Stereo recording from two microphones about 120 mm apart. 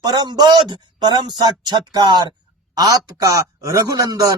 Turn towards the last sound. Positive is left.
turn(degrees=-30)  # may be behind; listen again after turning